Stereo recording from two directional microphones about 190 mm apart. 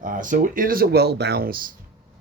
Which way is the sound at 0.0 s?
45° right (ahead or behind).